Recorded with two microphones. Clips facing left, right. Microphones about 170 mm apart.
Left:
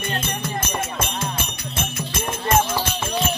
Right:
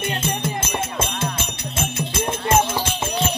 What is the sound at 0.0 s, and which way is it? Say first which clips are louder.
Music: right 3 dB; 25° right (ahead or behind).